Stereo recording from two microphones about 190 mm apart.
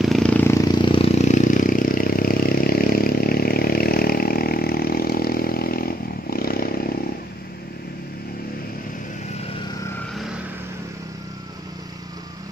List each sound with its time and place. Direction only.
0.0 s vehicle: centre (ahead or behind); by 6.7 s 50° left (ahead or behind)